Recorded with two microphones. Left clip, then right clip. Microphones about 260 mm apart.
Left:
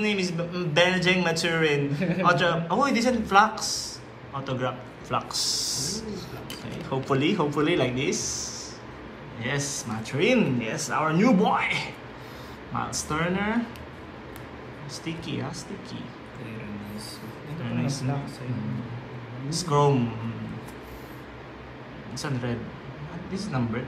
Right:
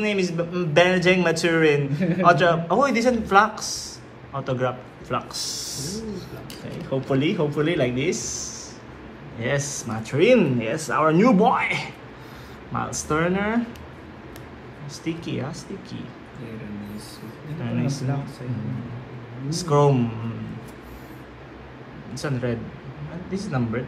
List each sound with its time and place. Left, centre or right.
0.0 s a man's voice: centre
5.3 s a sound: left
6.9 s speech: left; by 13.6 s centre
15.0 s speech: centre
19.5 s speech: centre
22.1 s speech: centre